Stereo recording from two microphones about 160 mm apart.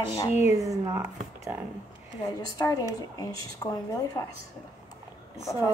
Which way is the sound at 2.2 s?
20° left (ahead or behind).